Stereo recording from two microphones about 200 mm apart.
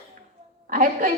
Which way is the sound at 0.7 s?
45° right (ahead or behind).